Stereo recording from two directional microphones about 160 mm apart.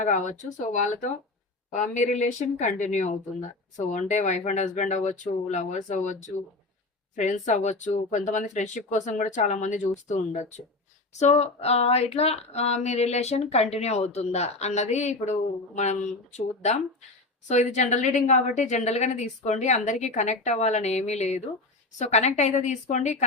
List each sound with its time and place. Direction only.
0.0 s speech: 50° left (ahead or behind)